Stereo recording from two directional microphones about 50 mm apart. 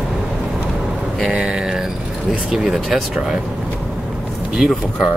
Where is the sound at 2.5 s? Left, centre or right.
Centre.